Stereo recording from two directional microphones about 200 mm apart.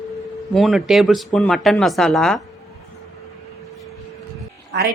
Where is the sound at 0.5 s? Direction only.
Centre (ahead or behind).